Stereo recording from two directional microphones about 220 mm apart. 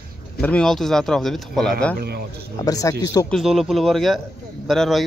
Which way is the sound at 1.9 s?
45° right (ahead or behind).